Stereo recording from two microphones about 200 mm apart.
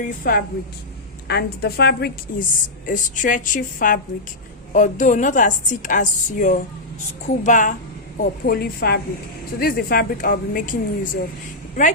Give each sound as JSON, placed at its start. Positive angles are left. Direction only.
{"t": 0.0, "sound": "a woman's voice", "side_deg": 45}